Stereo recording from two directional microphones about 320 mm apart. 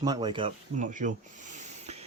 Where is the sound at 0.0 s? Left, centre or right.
Centre.